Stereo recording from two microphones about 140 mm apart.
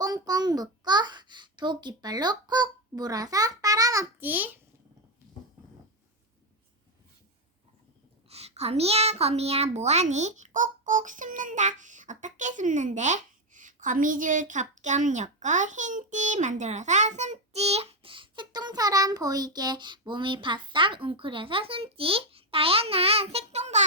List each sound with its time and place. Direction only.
0.0 s a sound: 25° right (ahead or behind)
4.2 s a child's voice: 10° right (ahead or behind)
8.3 s a child's voice: 45° right (ahead or behind)